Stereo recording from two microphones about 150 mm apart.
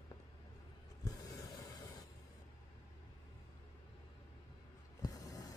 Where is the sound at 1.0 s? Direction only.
25° left (ahead or behind).